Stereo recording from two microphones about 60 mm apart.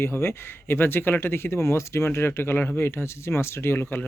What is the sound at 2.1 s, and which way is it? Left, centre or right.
Speech, left.